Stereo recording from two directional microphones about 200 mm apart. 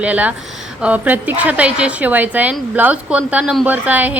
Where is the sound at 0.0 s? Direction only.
5° right (ahead or behind).